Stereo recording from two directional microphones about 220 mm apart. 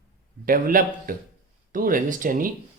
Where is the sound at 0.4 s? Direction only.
40° right (ahead or behind).